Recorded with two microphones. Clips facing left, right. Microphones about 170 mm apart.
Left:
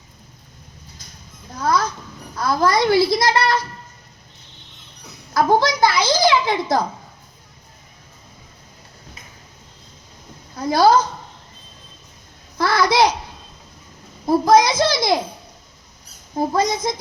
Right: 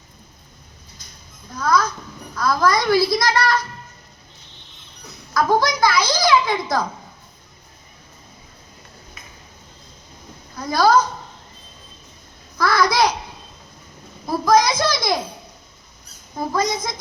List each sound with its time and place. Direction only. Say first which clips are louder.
1.5 s a sound: right 1 dB; 25° left (ahead or behind)
2.3 s a child's voice: even; 30° left (ahead or behind)
5.3 s a child's voice: left 2 dB; 25° left (ahead or behind)
10.6 s a child's voice: left 3 dB; 25° left (ahead or behind)
12.5 s a child's voice: left 1 dB; 25° left (ahead or behind)
14.4 s a child's voice: left 1 dB; 25° left (ahead or behind)
16.5 s a child's voice: left 1 dB; 25° left (ahead or behind)